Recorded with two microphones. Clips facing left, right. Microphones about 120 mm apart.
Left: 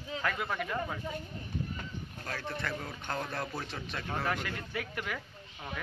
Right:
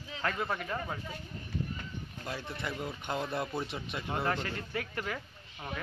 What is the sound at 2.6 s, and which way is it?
Speech, 10° right (ahead or behind).